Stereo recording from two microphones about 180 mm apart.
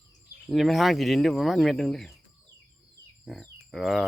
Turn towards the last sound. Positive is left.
turn(degrees=0)  # may be behind; listen again after turning